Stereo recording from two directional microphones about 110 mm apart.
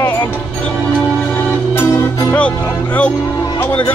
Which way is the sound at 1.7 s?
20° left (ahead or behind).